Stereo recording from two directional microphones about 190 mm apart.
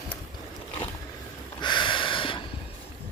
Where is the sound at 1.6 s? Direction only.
25° left (ahead or behind).